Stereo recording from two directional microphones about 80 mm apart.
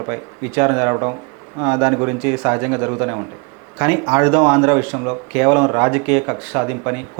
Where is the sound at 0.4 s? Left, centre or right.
Centre.